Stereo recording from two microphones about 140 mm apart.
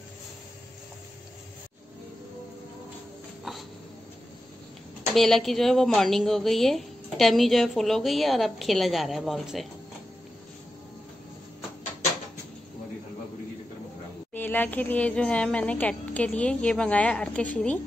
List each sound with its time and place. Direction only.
5.1 s a woman's voice: centre (ahead or behind)
14.3 s speech: 15° left (ahead or behind)